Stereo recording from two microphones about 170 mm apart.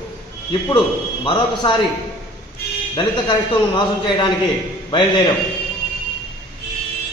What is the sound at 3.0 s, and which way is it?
A man's voice, 25° left (ahead or behind).